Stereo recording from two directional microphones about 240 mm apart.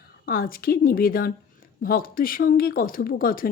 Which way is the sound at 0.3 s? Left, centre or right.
Left.